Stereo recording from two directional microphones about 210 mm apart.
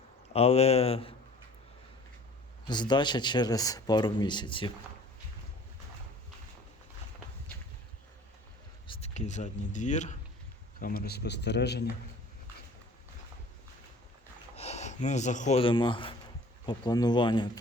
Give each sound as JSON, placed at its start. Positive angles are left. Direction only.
{"t": 0.3, "sound": "a man's voice", "side_deg": 30}
{"t": 2.6, "sound": "a man's voice", "side_deg": 20}
{"t": 8.9, "sound": "speech", "side_deg": 30}
{"t": 14.5, "sound": "a man's voice", "side_deg": 30}